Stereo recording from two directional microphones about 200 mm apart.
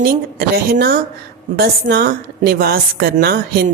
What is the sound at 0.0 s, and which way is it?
A woman's voice, 50° right (ahead or behind).